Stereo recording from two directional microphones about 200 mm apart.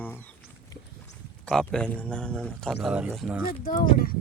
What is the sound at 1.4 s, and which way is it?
Speech, 5° left (ahead or behind).